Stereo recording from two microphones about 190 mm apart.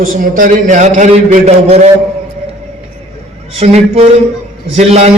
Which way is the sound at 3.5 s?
35° right (ahead or behind).